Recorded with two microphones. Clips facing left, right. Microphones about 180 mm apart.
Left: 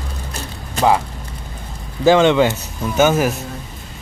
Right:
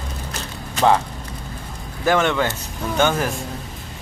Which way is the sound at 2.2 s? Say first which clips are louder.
Left 7 dB; 20° left (ahead or behind).